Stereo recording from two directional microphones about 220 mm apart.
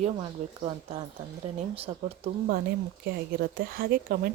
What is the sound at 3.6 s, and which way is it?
Speech, 45° right (ahead or behind).